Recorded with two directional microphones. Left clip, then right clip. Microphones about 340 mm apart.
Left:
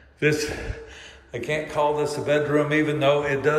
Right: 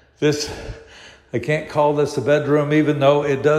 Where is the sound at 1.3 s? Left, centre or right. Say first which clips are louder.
Right 5 dB; right.